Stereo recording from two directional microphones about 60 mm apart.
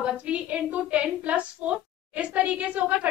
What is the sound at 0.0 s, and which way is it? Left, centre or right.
A woman's voice, right.